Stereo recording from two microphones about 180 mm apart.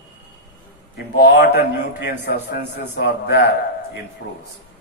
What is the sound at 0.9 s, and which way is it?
Speech, 65° left (ahead or behind).